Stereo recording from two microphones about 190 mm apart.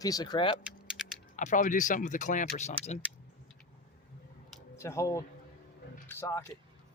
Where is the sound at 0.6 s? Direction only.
Centre (ahead or behind).